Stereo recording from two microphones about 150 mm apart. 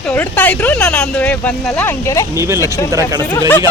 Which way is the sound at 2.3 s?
20° right (ahead or behind).